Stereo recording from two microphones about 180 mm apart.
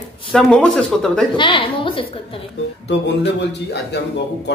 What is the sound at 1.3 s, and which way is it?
Speech, 25° left (ahead or behind).